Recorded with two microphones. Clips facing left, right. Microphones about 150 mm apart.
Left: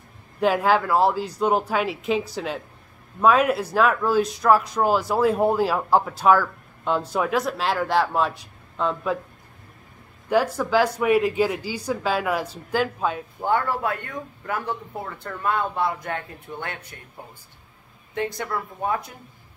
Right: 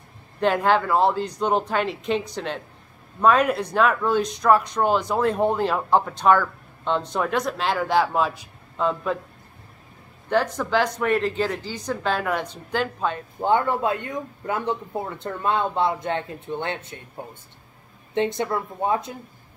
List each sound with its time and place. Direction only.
0.4 s speech: 5° left (ahead or behind)
10.3 s speech: 5° left (ahead or behind)
13.4 s a man's voice: 20° right (ahead or behind)